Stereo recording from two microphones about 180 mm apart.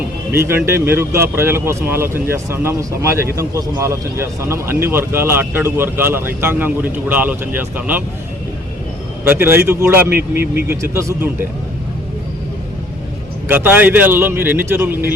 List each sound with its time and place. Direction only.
0.3 s speech: 15° right (ahead or behind)
9.2 s speech: 10° right (ahead or behind)
10.1 s speech: 60° right (ahead or behind)
10.7 s speech: 15° right (ahead or behind)
13.5 s speech: 10° right (ahead or behind)